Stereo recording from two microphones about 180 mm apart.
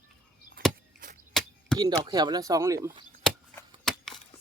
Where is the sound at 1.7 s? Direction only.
20° right (ahead or behind).